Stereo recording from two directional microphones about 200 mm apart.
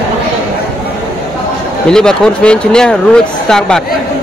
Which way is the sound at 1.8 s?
5° left (ahead or behind).